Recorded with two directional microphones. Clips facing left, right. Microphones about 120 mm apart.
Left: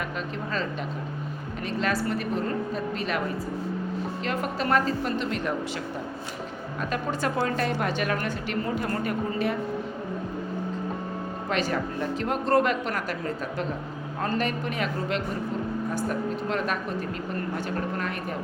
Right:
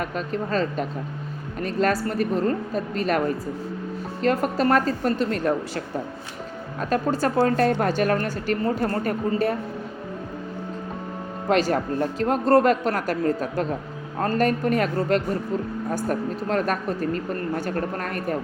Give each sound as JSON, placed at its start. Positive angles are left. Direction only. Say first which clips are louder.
{"t": 0.0, "sound": "a woman's voice", "louder": "right 5 dB", "side_deg": -40}
{"t": 6.9, "sound": "a woman's voice", "louder": "right 7 dB", "side_deg": -40}
{"t": 11.4, "sound": "a woman's voice", "louder": "right 7 dB", "side_deg": -40}